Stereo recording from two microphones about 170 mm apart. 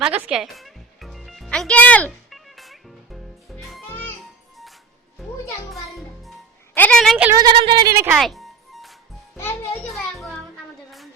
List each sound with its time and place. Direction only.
0.3 s music: centre (ahead or behind)
3.8 s music: 10° left (ahead or behind)
5.7 s music: centre (ahead or behind)
6.7 s a sound: 5° left (ahead or behind)
7.3 s a sound: 25° right (ahead or behind)
8.1 s music: centre (ahead or behind)
9.4 s music: 15° left (ahead or behind)
9.8 s music: centre (ahead or behind)